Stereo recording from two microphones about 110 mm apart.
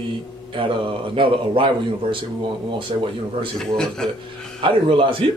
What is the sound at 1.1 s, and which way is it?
Speech, 55° right (ahead or behind).